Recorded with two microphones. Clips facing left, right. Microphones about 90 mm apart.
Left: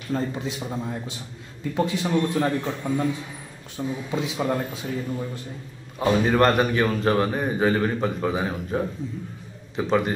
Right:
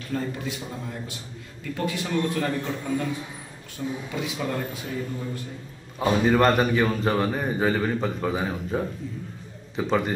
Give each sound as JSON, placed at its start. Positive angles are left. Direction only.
{"t": 0.1, "sound": "a man's voice", "side_deg": 25}
{"t": 5.9, "sound": "a man's voice", "side_deg": 0}